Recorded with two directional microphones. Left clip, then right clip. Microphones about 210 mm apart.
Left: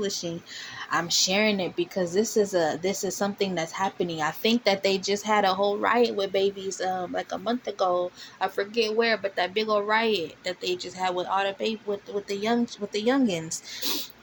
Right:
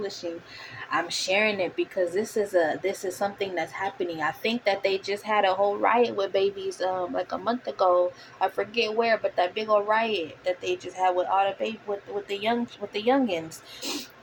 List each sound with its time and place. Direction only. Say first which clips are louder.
0.9 s speech: left 2 dB; 50° left (ahead or behind)
12.9 s speech: right 1 dB; 50° left (ahead or behind)